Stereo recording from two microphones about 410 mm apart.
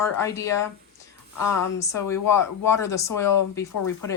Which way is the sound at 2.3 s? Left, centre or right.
Centre.